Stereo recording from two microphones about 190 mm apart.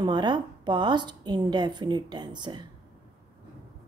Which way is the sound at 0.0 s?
25° right (ahead or behind).